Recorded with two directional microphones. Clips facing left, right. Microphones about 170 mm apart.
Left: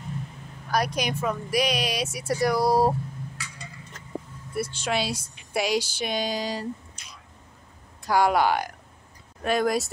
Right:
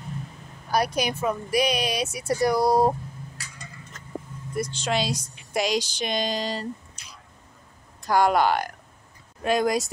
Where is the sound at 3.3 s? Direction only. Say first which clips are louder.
Left 2 dB; 40° right (ahead or behind).